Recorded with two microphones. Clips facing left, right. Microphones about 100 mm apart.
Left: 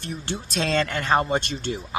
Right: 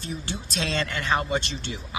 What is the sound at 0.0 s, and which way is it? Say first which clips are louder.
A man's voice: left 2 dB; 55° left (ahead or behind).